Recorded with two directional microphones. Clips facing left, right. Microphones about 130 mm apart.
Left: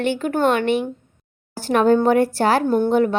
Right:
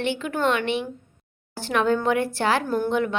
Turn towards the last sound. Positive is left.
turn(degrees=40)  # may be behind; listen again after turning